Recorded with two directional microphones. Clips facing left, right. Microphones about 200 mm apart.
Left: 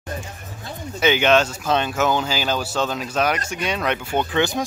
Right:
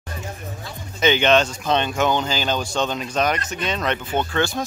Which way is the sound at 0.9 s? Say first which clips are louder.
Even; 10° left (ahead or behind).